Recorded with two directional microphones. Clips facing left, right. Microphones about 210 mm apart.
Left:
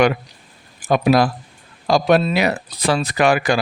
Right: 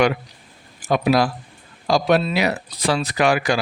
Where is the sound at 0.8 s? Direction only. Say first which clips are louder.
Left 3 dB; 50° left (ahead or behind).